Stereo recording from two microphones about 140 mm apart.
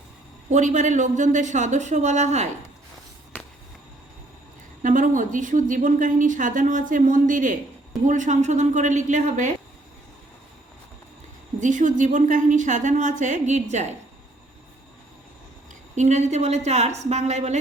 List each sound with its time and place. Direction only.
0.5 s a woman's voice: 60° right (ahead or behind)
4.8 s a woman's voice: 65° right (ahead or behind)
11.6 s a woman's voice: 65° right (ahead or behind)
16.0 s a woman's voice: 55° right (ahead or behind)